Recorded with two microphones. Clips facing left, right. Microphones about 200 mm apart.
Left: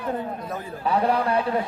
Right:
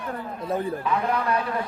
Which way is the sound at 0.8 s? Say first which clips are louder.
Left 3 dB; 35° left (ahead or behind).